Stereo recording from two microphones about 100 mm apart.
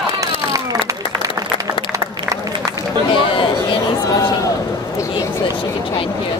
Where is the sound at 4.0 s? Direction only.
35° left (ahead or behind).